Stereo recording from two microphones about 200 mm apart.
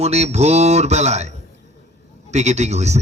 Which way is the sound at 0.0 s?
30° right (ahead or behind).